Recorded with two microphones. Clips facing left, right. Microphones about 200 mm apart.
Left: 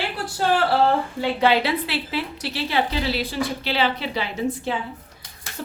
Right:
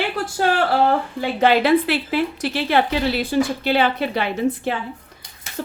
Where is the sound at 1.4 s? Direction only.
50° right (ahead or behind).